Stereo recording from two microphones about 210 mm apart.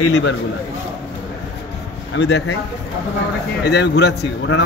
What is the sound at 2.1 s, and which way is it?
Speech, 55° left (ahead or behind).